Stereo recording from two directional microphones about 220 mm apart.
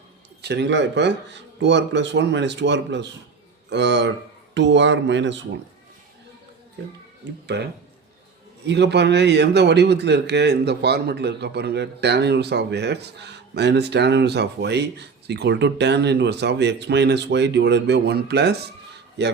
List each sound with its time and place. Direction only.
0.4 s a man's voice: 50° right (ahead or behind)
7.4 s a man's voice: 50° right (ahead or behind)